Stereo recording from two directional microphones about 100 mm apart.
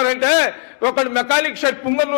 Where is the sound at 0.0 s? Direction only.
20° left (ahead or behind).